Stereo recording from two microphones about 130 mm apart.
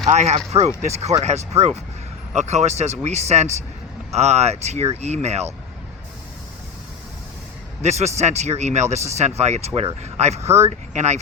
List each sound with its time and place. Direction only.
0.1 s speech: 65° right (ahead or behind)
7.8 s speech: 60° right (ahead or behind)
10.4 s speech: 20° right (ahead or behind)
10.7 s speech: 60° right (ahead or behind)